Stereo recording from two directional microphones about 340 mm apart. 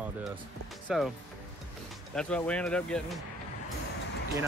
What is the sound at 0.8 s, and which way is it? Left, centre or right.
Speech, centre.